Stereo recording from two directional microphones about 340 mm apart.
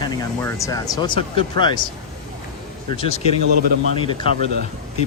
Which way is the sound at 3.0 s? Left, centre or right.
Centre.